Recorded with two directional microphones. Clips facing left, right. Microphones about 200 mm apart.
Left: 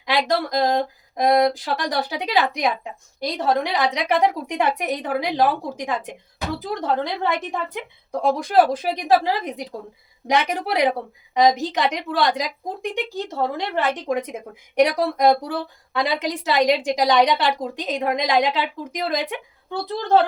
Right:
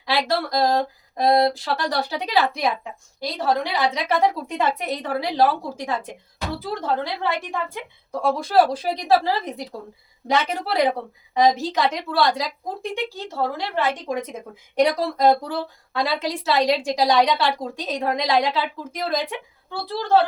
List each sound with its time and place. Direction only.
0.0 s a woman's voice: 15° left (ahead or behind)